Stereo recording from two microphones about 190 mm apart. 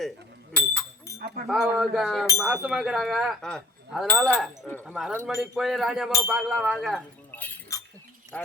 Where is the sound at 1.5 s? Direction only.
Centre (ahead or behind).